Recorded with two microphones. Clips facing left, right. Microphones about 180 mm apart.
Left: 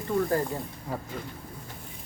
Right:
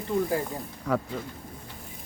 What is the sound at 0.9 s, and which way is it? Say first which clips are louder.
Speech: right 9 dB; 80° right.